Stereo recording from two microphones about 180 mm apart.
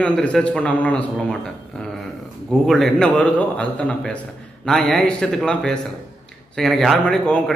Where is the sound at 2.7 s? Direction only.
5° left (ahead or behind).